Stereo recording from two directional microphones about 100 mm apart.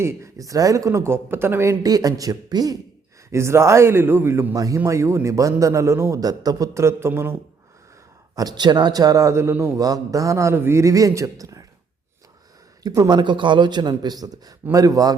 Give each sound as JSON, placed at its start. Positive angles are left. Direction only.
{"t": 0.0, "sound": "a man's voice", "side_deg": -30}
{"t": 1.8, "sound": "a man's voice", "side_deg": -40}
{"t": 3.3, "sound": "a man's voice", "side_deg": -25}
{"t": 8.4, "sound": "a man's voice", "side_deg": -45}
{"t": 12.8, "sound": "a man's voice", "side_deg": -35}